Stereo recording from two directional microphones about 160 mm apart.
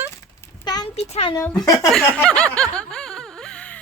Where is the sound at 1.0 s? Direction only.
40° left (ahead or behind).